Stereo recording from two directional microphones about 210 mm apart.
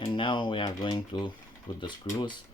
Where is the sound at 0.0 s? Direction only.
25° left (ahead or behind).